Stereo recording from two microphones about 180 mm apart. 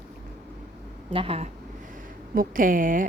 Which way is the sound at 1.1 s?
30° right (ahead or behind).